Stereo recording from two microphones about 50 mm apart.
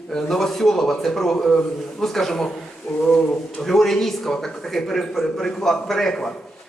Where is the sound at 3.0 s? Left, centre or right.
Left.